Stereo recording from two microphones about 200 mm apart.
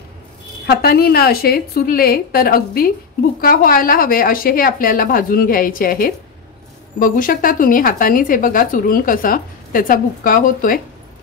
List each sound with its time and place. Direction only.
0.7 s speech: 50° left (ahead or behind)